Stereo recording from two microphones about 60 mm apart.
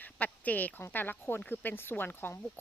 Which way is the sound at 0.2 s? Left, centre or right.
Left.